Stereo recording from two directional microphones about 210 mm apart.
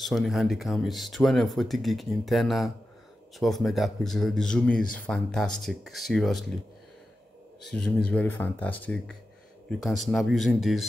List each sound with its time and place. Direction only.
0.0 s speech: centre (ahead or behind)
7.6 s speech: 5° left (ahead or behind)